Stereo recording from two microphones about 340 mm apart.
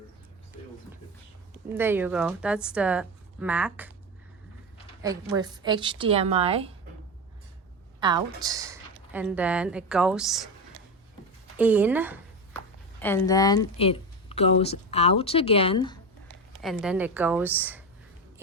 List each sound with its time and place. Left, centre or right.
1.7 s speech: centre
5.3 s speech: centre
8.0 s speech: centre
11.5 s speech: centre
13.0 s speech: centre
16.6 s speech: centre